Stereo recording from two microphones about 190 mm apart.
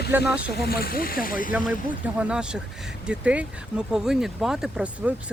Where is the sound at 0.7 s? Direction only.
50° left (ahead or behind).